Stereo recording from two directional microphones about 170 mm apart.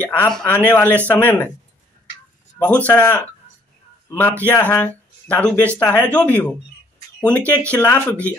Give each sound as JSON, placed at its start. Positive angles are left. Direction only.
{"t": 0.0, "sound": "speech", "side_deg": 10}
{"t": 2.6, "sound": "a man's voice", "side_deg": 10}